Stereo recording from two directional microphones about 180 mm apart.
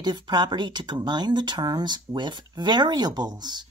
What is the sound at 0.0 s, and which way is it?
Speech, 25° right (ahead or behind).